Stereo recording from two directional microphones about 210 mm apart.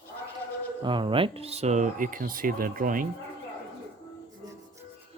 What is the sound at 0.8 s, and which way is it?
Speech, 20° right (ahead or behind).